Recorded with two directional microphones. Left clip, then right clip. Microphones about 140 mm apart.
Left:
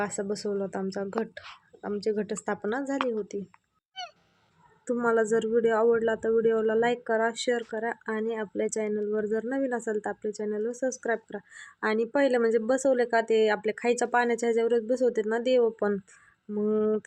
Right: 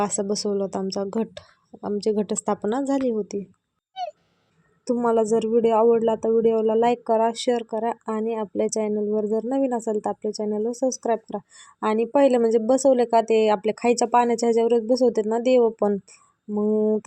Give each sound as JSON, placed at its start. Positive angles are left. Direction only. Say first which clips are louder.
{"t": 0.0, "sound": "a woman's voice", "louder": "right 6 dB", "side_deg": -45}
{"t": 4.9, "sound": "a woman's voice", "louder": "right 4 dB", "side_deg": -20}